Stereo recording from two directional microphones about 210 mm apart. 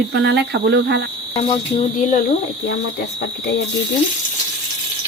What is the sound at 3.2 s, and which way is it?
Speech, 55° left (ahead or behind).